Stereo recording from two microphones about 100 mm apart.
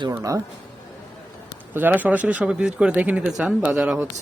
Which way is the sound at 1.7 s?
20° right (ahead or behind).